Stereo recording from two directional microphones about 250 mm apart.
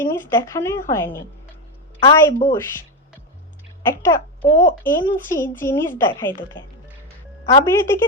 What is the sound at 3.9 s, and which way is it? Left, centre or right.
Speech, centre.